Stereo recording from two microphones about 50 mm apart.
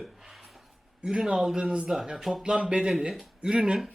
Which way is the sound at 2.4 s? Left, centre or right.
Centre.